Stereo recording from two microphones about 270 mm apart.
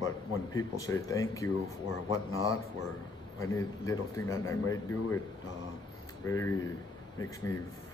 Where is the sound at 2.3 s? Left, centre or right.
Left.